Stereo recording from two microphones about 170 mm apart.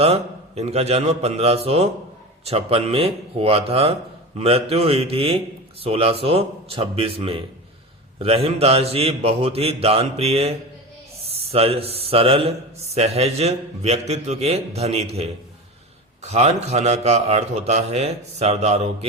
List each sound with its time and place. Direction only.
0.0 s speech: 35° right (ahead or behind)